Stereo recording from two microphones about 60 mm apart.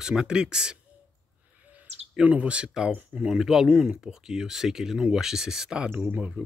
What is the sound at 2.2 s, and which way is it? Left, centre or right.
Speech, right.